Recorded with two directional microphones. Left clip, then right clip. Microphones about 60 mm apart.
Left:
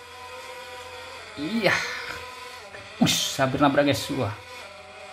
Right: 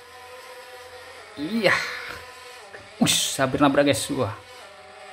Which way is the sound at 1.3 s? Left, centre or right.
Centre.